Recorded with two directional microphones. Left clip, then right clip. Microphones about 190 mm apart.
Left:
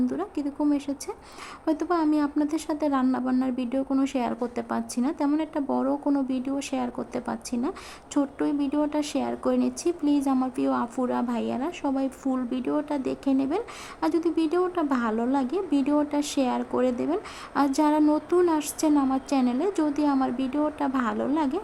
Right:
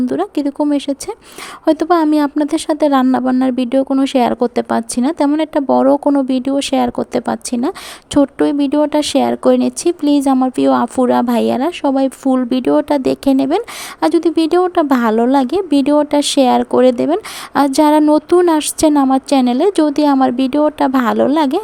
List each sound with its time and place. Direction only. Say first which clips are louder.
0.1 s a woman's voice: right 13 dB; 40° right (ahead or behind)